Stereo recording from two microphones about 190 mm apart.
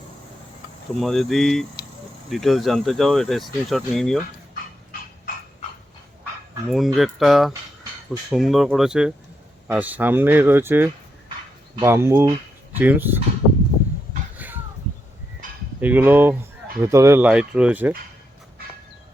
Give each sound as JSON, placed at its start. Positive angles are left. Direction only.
{"t": 0.9, "sound": "speech", "side_deg": 0}
{"t": 4.9, "sound": "frog", "side_deg": 50}
{"t": 6.7, "sound": "speech", "side_deg": 0}
{"t": 14.3, "sound": "a sound", "side_deg": -10}
{"t": 15.8, "sound": "speech", "side_deg": -10}